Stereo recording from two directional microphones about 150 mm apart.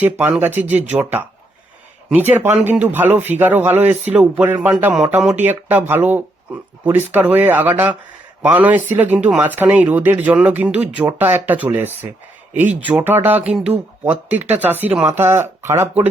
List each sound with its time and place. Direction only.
0.0 s speech: 10° right (ahead or behind)